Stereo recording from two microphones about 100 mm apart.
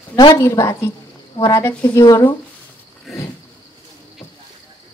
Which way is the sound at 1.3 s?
50° left (ahead or behind).